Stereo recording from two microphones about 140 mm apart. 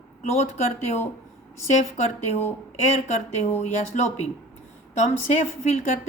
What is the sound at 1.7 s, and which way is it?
A woman's voice, 55° left (ahead or behind).